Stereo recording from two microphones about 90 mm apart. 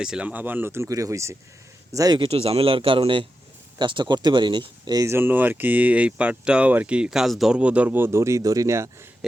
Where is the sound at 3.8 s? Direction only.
60° right (ahead or behind).